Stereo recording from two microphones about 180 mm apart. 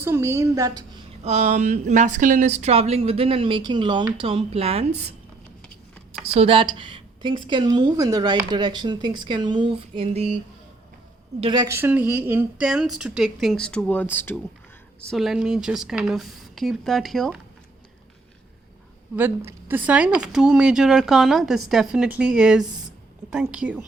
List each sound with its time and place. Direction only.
0.0 s a woman's voice: 15° right (ahead or behind)
1.2 s speech: 40° right (ahead or behind)
6.2 s a woman's voice: 35° right (ahead or behind)
11.3 s speech: 25° right (ahead or behind); by 14.3 s 10° left (ahead or behind)
15.1 s speech: centre (ahead or behind)
19.5 s speech: 10° right (ahead or behind)